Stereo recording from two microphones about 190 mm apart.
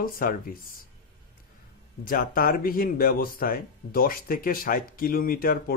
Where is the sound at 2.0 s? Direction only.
50° left (ahead or behind).